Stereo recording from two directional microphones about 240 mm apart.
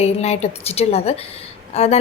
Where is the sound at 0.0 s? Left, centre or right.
Left.